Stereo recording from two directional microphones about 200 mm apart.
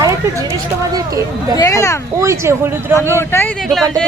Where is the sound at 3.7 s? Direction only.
Centre (ahead or behind).